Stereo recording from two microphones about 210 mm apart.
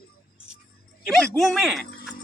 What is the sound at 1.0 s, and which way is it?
Speech, centre (ahead or behind).